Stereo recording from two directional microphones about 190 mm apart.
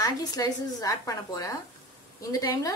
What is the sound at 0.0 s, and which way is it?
A woman's voice, 20° left (ahead or behind).